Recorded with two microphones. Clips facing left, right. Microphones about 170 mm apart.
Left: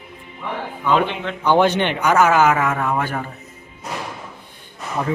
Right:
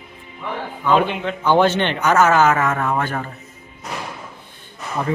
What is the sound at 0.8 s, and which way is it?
Speech, 10° right (ahead or behind).